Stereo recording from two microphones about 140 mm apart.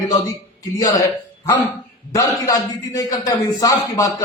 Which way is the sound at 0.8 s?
25° left (ahead or behind).